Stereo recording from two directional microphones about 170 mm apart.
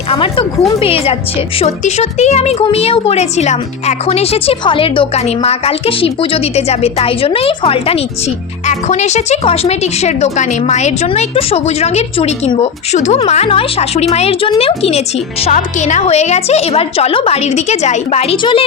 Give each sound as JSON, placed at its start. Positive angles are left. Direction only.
{"t": 0.1, "sound": "speech", "side_deg": 30}